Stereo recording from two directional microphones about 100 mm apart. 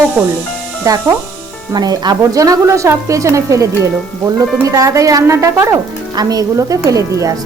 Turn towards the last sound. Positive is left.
turn(degrees=-35)  # may be behind; listen again after turning